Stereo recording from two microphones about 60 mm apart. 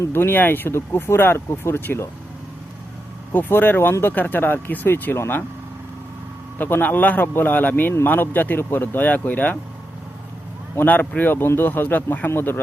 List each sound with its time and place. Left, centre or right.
0.1 s speech: left
3.3 s speech: left
6.6 s speech: left
10.8 s speech: left